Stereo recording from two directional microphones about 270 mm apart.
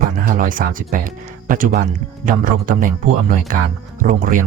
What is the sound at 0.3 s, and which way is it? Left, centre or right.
Speech, right.